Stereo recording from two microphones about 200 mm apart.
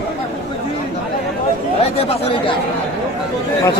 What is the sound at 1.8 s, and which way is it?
Chatter, 30° left (ahead or behind).